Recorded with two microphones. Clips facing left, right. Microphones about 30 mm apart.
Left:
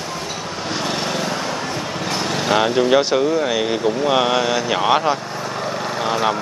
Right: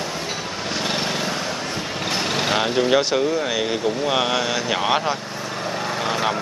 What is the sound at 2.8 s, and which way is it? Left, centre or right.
Speech, centre.